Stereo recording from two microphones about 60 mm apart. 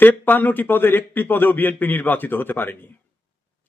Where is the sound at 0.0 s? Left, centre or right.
Left.